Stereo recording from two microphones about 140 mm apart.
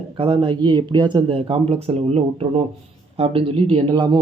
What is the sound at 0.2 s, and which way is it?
Speech, 40° right (ahead or behind).